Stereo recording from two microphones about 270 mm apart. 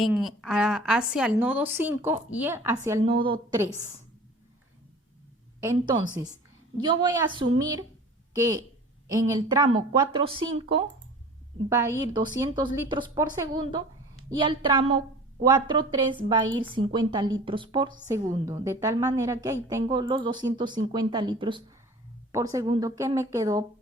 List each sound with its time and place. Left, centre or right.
0.0 s a woman's voice: centre
5.5 s a woman's voice: centre
11.7 s a woman's voice: centre